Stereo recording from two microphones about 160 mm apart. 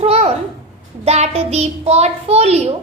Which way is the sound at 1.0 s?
45° right (ahead or behind).